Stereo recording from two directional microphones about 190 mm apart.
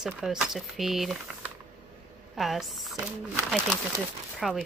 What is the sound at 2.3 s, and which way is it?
Speech, centre (ahead or behind).